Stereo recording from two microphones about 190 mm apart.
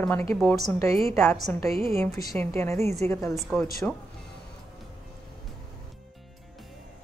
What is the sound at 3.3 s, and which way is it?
Speech, centre (ahead or behind).